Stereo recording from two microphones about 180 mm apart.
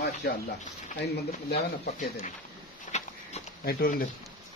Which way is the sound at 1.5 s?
40° left (ahead or behind).